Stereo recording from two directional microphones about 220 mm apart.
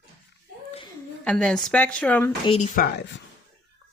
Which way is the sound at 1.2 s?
5° left (ahead or behind).